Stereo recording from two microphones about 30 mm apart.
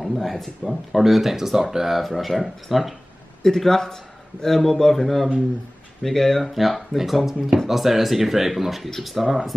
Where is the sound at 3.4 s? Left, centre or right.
Centre.